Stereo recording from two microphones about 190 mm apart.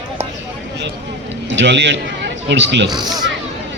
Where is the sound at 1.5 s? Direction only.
70° right (ahead or behind).